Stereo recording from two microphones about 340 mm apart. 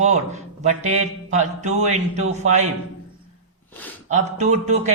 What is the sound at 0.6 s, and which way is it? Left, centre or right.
Speech, centre.